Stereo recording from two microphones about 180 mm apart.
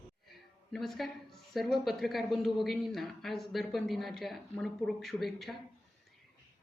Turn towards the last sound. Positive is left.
turn(degrees=0)  # may be behind; listen again after turning